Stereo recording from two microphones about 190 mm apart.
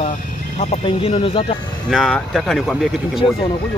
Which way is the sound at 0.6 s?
35° left (ahead or behind).